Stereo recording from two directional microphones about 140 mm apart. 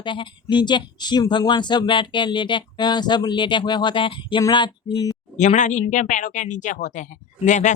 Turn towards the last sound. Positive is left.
turn(degrees=60)  # may be behind; listen again after turning